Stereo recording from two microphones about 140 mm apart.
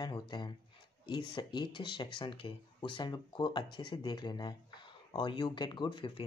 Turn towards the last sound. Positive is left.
turn(degrees=35)  # may be behind; listen again after turning